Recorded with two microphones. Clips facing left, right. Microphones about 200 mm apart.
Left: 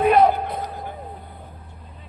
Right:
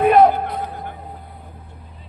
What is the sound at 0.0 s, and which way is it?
Music, 50° right (ahead or behind).